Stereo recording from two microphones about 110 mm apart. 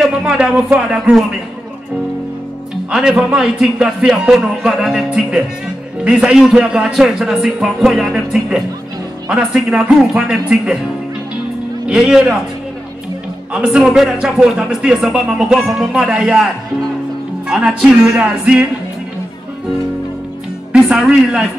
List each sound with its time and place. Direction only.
0.2 s speech: 5° right (ahead or behind)
2.9 s speech: 10° right (ahead or behind)
11.9 s speech: 5° right (ahead or behind)
13.5 s speech: 10° right (ahead or behind)
17.5 s speech: 5° right (ahead or behind)
20.7 s speech: 5° right (ahead or behind)